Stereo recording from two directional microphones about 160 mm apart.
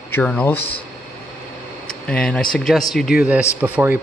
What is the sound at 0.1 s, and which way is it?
Speech, 10° left (ahead or behind).